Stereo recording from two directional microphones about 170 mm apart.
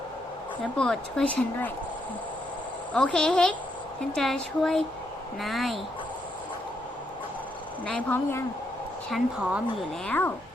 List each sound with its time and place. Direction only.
0.8 s speech: 5° left (ahead or behind)
2.9 s speech: 5° left (ahead or behind)
7.9 s speech: 5° left (ahead or behind)
10.1 s speech: 10° left (ahead or behind)